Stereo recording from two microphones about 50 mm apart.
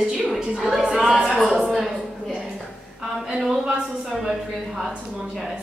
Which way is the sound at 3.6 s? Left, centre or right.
Centre.